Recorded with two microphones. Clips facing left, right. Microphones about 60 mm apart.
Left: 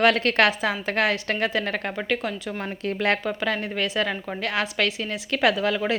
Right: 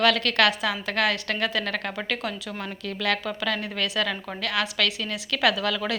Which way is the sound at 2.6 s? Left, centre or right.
Left.